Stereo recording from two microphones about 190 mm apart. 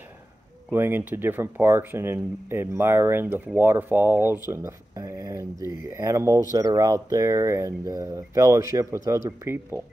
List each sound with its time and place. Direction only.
0.7 s speech: 10° right (ahead or behind)